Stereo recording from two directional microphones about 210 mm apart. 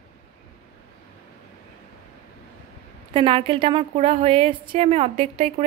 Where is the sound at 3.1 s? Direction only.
25° right (ahead or behind).